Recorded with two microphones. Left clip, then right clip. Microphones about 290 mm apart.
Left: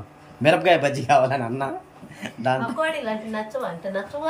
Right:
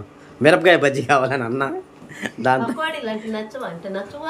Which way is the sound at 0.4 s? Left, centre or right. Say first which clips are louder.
Right 4 dB; centre.